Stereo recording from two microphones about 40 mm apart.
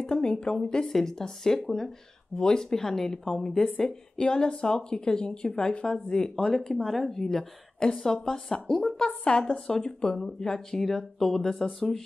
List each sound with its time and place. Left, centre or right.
0.0 s a woman's voice: left
5.9 s a woman's voice: centre
6.7 s a woman's voice: centre